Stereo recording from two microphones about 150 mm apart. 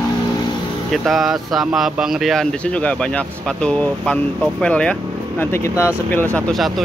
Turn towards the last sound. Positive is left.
turn(degrees=0)  # may be behind; listen again after turning